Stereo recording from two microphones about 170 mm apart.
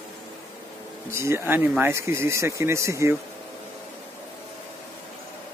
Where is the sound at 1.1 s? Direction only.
15° right (ahead or behind).